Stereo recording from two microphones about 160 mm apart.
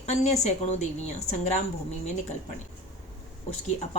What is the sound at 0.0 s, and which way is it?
Speech, 45° left (ahead or behind).